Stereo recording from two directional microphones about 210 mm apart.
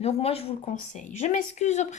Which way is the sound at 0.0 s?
30° left (ahead or behind).